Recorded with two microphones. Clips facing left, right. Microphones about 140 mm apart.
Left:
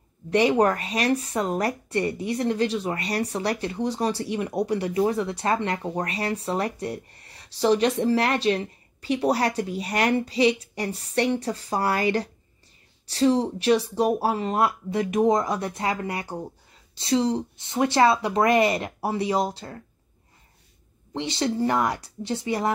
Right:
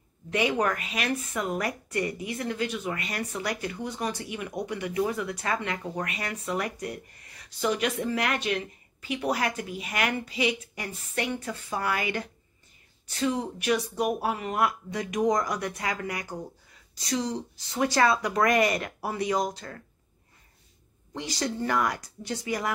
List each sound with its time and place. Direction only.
0.3 s speech: 35° left (ahead or behind)
21.1 s speech: 25° left (ahead or behind)